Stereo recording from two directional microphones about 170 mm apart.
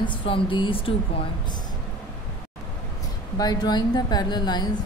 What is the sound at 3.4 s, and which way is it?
Speech, 25° left (ahead or behind).